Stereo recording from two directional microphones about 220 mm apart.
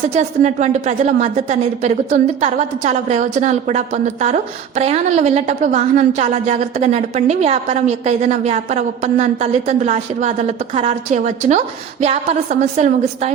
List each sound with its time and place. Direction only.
0.0 s a woman's voice: 30° right (ahead or behind)